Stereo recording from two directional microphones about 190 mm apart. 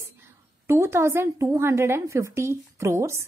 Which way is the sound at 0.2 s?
15° right (ahead or behind).